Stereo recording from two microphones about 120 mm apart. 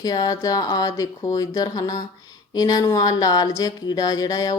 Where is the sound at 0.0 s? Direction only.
30° left (ahead or behind).